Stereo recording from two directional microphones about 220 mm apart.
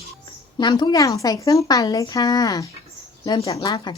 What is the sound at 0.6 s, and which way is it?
A woman's voice, 20° left (ahead or behind).